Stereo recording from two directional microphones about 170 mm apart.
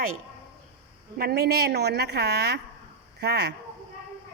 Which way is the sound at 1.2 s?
70° right (ahead or behind).